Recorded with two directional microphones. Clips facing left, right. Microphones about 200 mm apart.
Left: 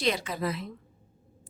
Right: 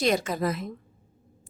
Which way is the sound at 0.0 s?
45° right (ahead or behind).